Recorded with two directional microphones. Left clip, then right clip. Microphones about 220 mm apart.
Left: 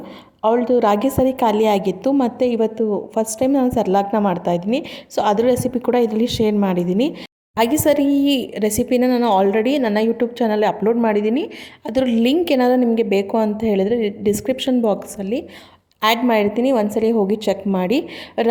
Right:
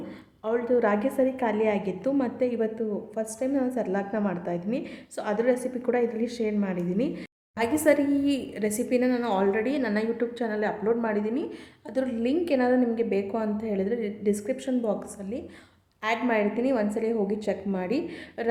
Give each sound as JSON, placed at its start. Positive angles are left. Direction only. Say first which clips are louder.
{"t": 0.4, "sound": "a woman's voice", "louder": "left 9 dB", "side_deg": 30}